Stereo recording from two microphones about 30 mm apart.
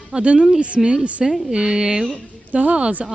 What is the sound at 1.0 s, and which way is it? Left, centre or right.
Speech, right.